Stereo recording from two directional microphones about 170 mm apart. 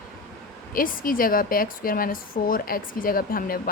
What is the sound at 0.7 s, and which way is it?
A woman's voice, 55° left (ahead or behind).